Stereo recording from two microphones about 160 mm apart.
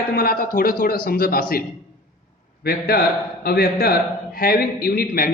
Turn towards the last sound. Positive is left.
turn(degrees=70)  # may be behind; listen again after turning